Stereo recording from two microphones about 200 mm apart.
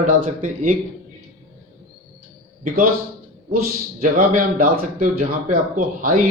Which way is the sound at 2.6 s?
45° right (ahead or behind).